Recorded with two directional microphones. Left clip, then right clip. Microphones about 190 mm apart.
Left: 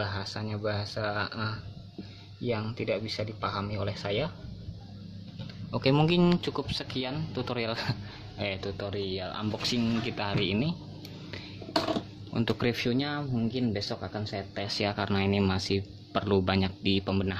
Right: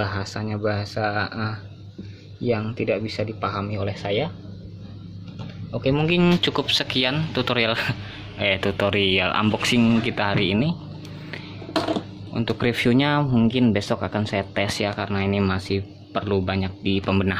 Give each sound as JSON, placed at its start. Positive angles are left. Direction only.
{"t": 0.0, "sound": "speech", "side_deg": -10}
{"t": 5.7, "sound": "speech", "side_deg": 25}
{"t": 6.3, "sound": "speech", "side_deg": 5}
{"t": 8.5, "sound": "speech", "side_deg": -20}
{"t": 12.4, "sound": "speech", "side_deg": 20}
{"t": 12.7, "sound": "speech", "side_deg": -10}
{"t": 14.8, "sound": "speech", "side_deg": 20}